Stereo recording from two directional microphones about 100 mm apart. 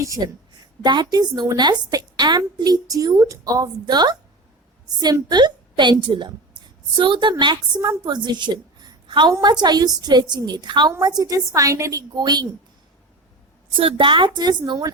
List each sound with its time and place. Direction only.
0.2 s a woman's voice: 45° right (ahead or behind)
7.8 s a woman's voice: 40° right (ahead or behind)
13.7 s a woman's voice: 60° right (ahead or behind); by 14.9 s 40° right (ahead or behind)